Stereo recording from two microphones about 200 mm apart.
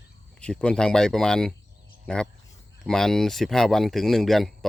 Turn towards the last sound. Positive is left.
turn(degrees=0)  # may be behind; listen again after turning